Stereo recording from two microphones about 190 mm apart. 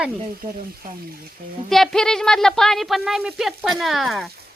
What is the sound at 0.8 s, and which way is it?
Speech, 45° right (ahead or behind).